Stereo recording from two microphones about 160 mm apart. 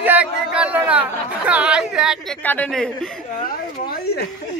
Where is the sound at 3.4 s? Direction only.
70° left (ahead or behind).